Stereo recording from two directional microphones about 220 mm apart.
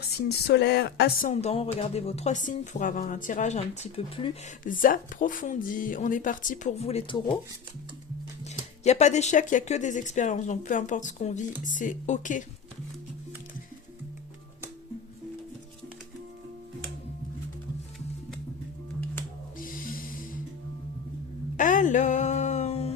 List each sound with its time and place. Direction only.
0.2 s speech: 45° left (ahead or behind)
1.3 s speech: 30° left (ahead or behind)
4.6 s speech: 40° left (ahead or behind)
8.4 s speech: 30° left (ahead or behind)
19.5 s music: 40° left (ahead or behind)
21.5 s music: 35° left (ahead or behind)